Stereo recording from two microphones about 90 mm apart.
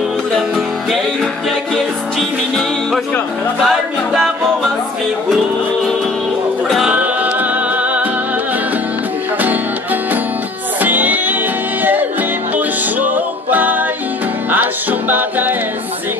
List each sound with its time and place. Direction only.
2.1 s music: centre (ahead or behind)
6.9 s music: 15° right (ahead or behind)
10.8 s music: 20° right (ahead or behind)